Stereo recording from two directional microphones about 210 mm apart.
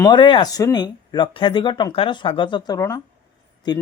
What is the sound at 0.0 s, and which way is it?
Speech, 20° left (ahead or behind).